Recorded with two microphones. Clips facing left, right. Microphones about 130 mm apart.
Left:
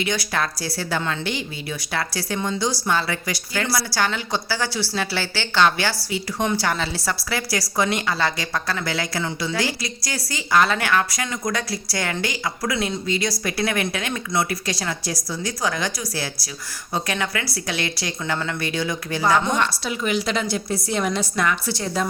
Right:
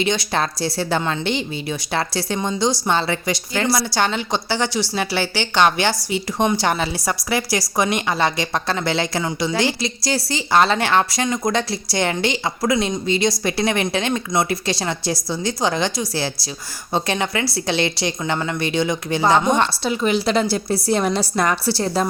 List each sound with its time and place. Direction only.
0.0 s a woman's voice: 25° right (ahead or behind)